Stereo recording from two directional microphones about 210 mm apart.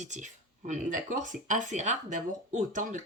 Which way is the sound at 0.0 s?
35° right (ahead or behind).